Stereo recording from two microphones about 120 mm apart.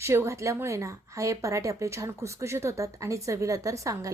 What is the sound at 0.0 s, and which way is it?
A woman's voice, 20° right (ahead or behind).